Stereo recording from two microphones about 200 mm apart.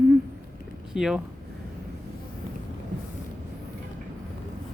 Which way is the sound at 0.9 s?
Centre (ahead or behind).